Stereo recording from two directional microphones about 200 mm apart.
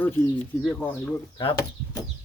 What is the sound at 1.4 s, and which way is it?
Speech, 25° left (ahead or behind).